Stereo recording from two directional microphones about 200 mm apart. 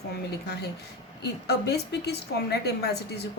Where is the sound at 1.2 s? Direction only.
55° left (ahead or behind).